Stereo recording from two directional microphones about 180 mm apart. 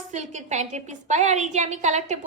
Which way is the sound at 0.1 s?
40° right (ahead or behind).